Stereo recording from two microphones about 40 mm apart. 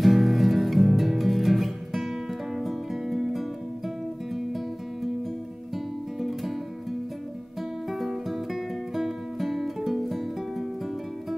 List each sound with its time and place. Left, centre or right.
0.0 s music: centre
6.1 s music: centre
7.9 s music: centre